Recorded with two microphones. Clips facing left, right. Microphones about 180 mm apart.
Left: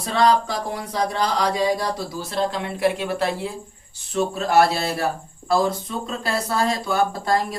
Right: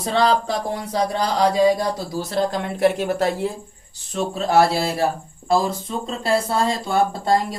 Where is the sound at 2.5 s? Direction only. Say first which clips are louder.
Right 3 dB; 45° right (ahead or behind).